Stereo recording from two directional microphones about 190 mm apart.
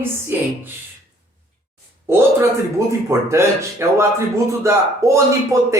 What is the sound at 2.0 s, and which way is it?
Speech, 15° right (ahead or behind).